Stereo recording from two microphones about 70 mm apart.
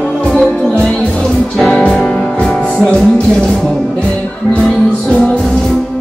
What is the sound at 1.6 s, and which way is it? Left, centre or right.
Music, centre.